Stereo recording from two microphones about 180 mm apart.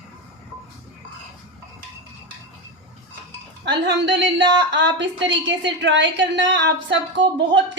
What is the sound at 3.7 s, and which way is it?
A woman's voice, 75° right (ahead or behind).